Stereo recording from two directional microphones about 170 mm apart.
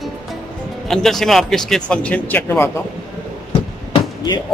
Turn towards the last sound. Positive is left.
turn(degrees=25)  # may be behind; listen again after turning